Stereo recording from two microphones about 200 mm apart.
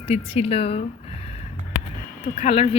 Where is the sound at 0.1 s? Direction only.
30° left (ahead or behind).